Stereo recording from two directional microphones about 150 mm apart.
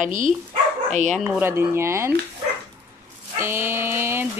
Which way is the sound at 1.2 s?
15° right (ahead or behind).